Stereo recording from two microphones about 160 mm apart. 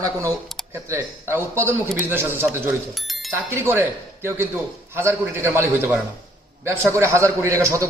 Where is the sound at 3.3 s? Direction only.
15° right (ahead or behind).